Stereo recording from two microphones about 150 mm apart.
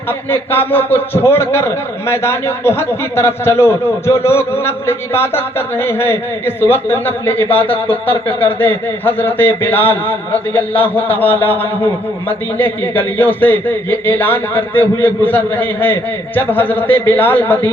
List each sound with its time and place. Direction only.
0.3 s a man's voice: 15° left (ahead or behind)